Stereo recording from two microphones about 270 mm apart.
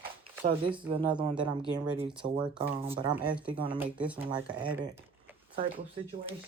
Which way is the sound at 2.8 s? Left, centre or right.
Right.